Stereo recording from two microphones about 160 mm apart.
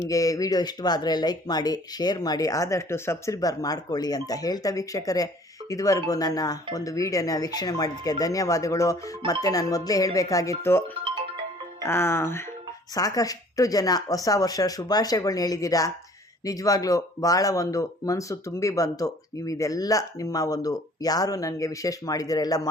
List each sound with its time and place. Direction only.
0.1 s speech: 20° left (ahead or behind)